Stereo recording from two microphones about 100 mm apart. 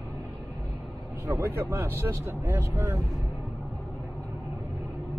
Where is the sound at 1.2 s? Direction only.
30° right (ahead or behind).